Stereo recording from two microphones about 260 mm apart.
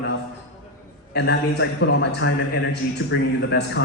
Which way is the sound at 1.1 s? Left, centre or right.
Left.